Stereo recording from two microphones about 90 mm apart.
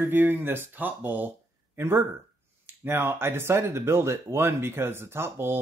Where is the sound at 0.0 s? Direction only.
25° right (ahead or behind).